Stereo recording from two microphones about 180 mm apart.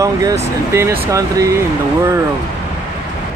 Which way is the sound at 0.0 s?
20° right (ahead or behind).